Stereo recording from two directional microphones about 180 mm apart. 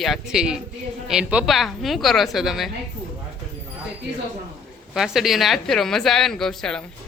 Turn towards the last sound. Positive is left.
turn(degrees=5)  # may be behind; listen again after turning